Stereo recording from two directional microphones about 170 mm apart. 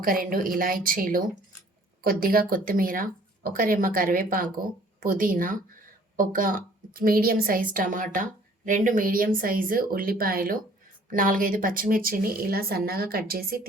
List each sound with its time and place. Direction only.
0.0 s a woman's voice: 55° right (ahead or behind)